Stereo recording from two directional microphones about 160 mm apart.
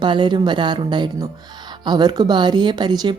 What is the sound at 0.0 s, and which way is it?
Speech, 30° right (ahead or behind).